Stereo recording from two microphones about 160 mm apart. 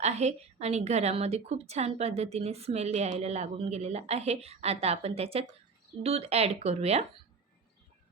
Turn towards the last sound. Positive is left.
turn(degrees=-40)  # may be behind; listen again after turning